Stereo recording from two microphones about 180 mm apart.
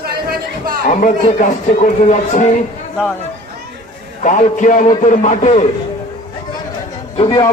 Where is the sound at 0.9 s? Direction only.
45° left (ahead or behind).